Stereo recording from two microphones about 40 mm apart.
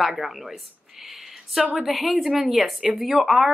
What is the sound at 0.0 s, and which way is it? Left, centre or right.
Speech, centre.